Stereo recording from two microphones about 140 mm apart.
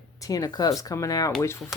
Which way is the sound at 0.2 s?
25° left (ahead or behind).